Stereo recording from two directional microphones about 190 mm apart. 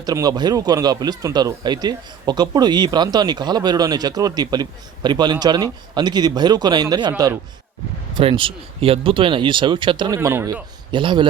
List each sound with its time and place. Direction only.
0.0 s speech: 20° right (ahead or behind)
10.2 s speech: 15° right (ahead or behind)